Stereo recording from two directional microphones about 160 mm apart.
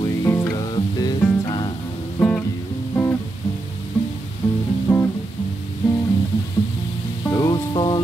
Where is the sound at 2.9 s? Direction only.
15° left (ahead or behind).